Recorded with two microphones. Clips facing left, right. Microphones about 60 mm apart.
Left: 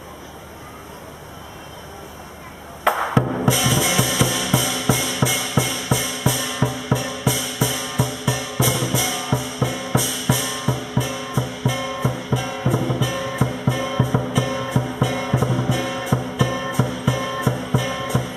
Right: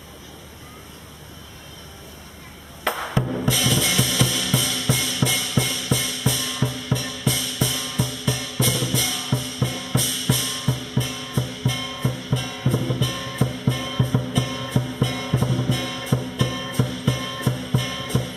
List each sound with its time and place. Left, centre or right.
2.9 s music: centre
3.2 s music: centre
3.4 s music: centre